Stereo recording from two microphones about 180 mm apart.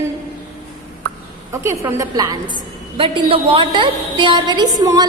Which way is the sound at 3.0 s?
30° right (ahead or behind).